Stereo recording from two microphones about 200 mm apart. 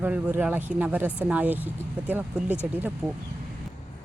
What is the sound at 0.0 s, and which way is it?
Speech, 10° right (ahead or behind).